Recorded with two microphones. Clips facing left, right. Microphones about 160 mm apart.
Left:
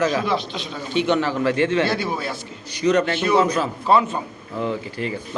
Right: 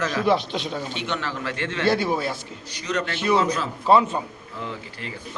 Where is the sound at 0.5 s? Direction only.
55° right (ahead or behind).